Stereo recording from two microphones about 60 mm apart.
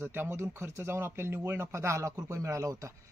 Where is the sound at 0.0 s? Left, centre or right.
Right.